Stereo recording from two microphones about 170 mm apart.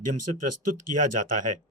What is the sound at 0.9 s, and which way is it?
Speech, 45° right (ahead or behind).